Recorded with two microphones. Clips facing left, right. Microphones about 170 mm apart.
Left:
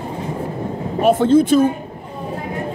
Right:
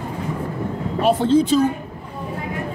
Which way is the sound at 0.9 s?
50° left (ahead or behind).